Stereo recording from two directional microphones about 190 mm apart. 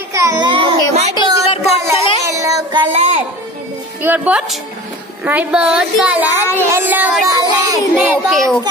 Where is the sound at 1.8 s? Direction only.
15° right (ahead or behind).